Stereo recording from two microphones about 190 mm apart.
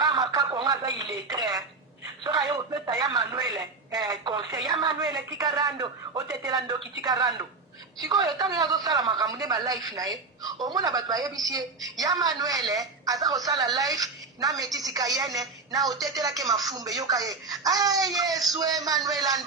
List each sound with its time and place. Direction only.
0.0 s speech: 20° right (ahead or behind)